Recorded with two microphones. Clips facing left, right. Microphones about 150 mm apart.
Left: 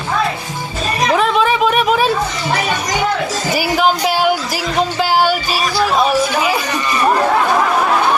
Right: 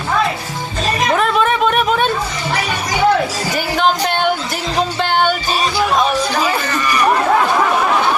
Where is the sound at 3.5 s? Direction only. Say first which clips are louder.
Left 2 dB; 5° left (ahead or behind).